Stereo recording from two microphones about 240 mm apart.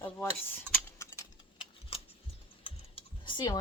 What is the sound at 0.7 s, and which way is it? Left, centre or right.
Tick-tock, centre.